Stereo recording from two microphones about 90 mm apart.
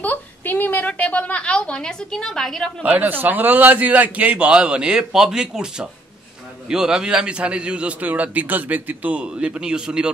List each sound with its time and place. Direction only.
0.0 s a woman's voice: 20° left (ahead or behind)
2.8 s a man's voice: 20° right (ahead or behind)